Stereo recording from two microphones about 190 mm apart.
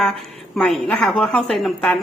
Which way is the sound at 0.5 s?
5° left (ahead or behind).